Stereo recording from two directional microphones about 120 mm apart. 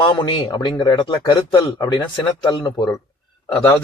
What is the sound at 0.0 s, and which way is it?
A man's voice, 40° left (ahead or behind).